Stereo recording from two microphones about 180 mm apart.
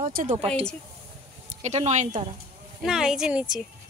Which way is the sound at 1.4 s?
40° right (ahead or behind).